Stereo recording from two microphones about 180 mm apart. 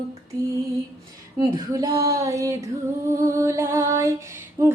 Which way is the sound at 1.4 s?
20° right (ahead or behind).